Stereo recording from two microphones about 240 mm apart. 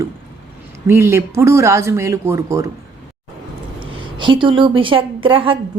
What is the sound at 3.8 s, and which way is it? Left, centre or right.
A woman's voice, centre.